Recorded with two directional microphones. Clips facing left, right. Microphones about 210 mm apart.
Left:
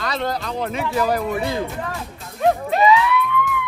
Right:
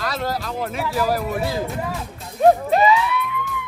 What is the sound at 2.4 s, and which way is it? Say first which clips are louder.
Music: right 3 dB; 35° right (ahead or behind).